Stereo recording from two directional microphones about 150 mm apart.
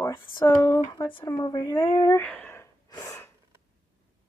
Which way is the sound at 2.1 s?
10° left (ahead or behind).